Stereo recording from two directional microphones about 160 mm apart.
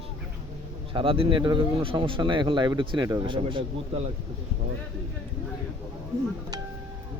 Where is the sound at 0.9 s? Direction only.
35° right (ahead or behind).